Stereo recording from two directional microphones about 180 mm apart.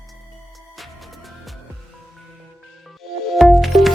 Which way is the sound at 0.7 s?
Centre (ahead or behind).